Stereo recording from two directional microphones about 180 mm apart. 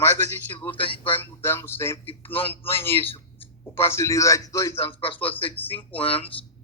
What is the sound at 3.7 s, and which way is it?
Speech, 15° left (ahead or behind).